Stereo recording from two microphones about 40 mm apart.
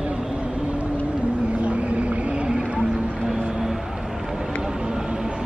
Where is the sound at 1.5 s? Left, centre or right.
Right.